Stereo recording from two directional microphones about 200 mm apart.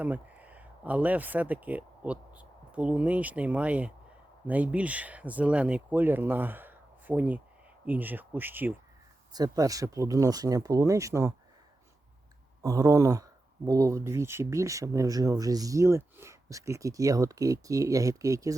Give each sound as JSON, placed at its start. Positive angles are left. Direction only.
{"t": 0.0, "sound": "speech", "side_deg": -10}
{"t": 12.6, "sound": "speech", "side_deg": -15}